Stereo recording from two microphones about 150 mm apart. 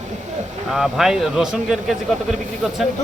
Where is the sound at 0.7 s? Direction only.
Centre (ahead or behind).